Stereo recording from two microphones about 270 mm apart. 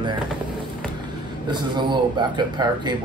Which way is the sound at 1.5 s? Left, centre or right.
Centre.